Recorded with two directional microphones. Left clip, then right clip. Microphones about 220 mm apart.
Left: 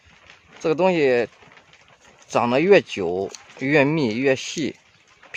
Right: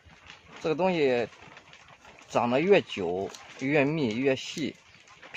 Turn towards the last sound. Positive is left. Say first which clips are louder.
# left 7 dB
turn(degrees=55)  # may be behind; listen again after turning